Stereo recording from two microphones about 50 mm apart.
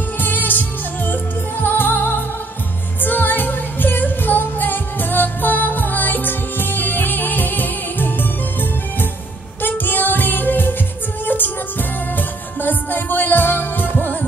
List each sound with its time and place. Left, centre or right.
0.2 s music: left